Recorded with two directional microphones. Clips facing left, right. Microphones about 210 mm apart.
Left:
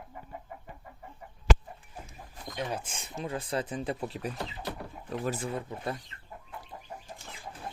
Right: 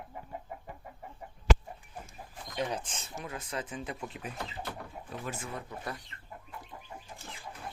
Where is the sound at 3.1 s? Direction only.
30° left (ahead or behind).